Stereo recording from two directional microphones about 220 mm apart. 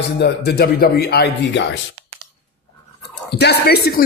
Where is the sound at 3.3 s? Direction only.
45° left (ahead or behind).